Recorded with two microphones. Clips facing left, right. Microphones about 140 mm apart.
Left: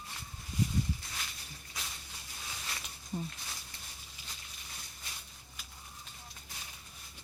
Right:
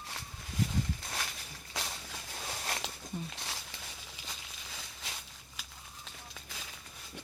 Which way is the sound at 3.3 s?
90° right.